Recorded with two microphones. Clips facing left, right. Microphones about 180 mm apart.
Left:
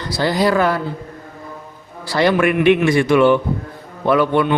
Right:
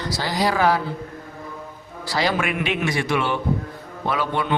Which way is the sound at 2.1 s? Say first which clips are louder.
Left 8 dB; 55° left (ahead or behind).